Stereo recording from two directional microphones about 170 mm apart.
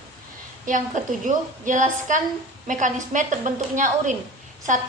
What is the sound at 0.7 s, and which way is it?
A woman's voice, 50° right (ahead or behind).